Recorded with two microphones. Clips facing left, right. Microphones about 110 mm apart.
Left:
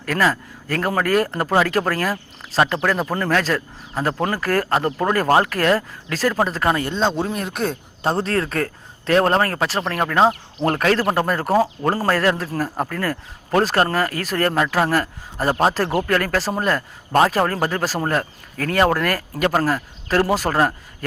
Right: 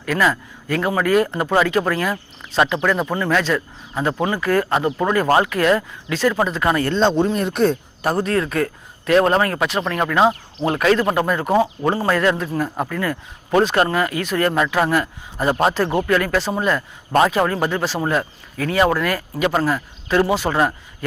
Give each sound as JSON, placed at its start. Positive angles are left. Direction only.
{"t": 0.0, "sound": "a man's voice", "side_deg": 45}
{"t": 6.8, "sound": "speech", "side_deg": 5}
{"t": 8.0, "sound": "a man's voice", "side_deg": 30}